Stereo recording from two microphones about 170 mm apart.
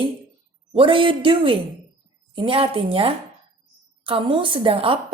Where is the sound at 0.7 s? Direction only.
30° right (ahead or behind).